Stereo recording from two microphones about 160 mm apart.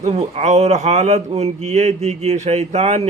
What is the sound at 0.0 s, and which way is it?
Speech, 45° right (ahead or behind).